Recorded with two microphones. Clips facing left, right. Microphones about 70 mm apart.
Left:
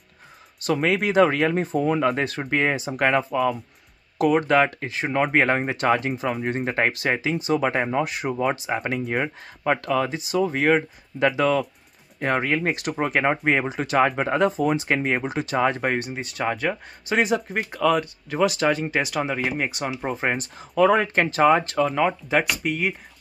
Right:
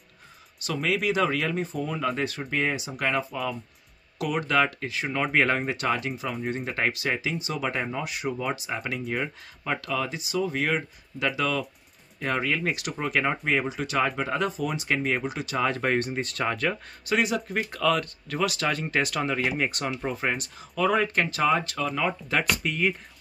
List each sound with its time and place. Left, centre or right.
0.6 s speech: left
4.2 s speech: left
15.8 s speech: centre
17.1 s speech: left
17.6 s speech: centre
20.1 s speech: left
22.3 s speech: centre